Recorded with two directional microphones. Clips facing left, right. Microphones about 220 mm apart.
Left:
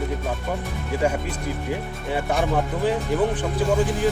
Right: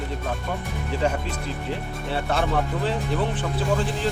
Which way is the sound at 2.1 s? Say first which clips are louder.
Left 2 dB; 15° left (ahead or behind).